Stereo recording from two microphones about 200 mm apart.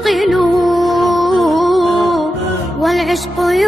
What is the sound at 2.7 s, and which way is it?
Speech, centre (ahead or behind).